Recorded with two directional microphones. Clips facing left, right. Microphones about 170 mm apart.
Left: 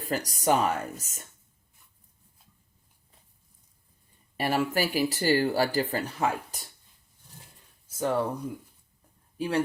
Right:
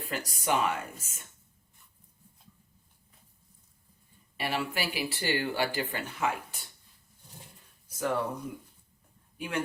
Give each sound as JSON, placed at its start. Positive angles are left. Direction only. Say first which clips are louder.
{"t": 0.0, "sound": "speech", "louder": "left 6 dB", "side_deg": 40}
{"t": 4.4, "sound": "speech", "louder": "left 6 dB", "side_deg": 40}
{"t": 7.9, "sound": "a sound", "louder": "left 3 dB", "side_deg": 25}
{"t": 9.4, "sound": "speech", "louder": "left 6 dB", "side_deg": 35}